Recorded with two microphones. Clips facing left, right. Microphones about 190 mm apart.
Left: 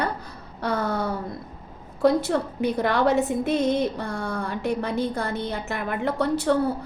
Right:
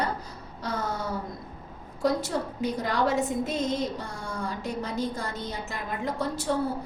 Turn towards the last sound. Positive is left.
turn(degrees=65)  # may be behind; listen again after turning